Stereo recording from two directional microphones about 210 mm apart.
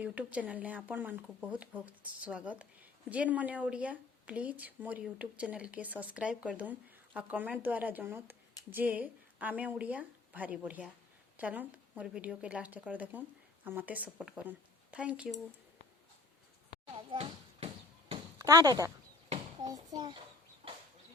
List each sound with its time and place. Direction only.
0.0 s speech: 5° right (ahead or behind)
17.1 s bouncing: 25° right (ahead or behind)
18.3 s speech: 15° right (ahead or behind)
19.3 s a sound: 20° right (ahead or behind)